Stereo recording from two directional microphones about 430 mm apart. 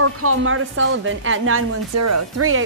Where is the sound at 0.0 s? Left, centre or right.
Right.